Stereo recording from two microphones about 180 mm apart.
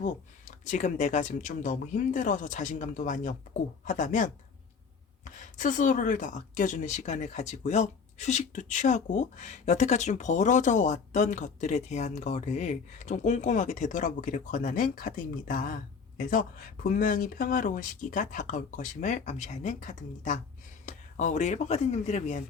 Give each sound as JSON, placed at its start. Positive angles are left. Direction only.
{"t": 0.6, "sound": "speech", "side_deg": 40}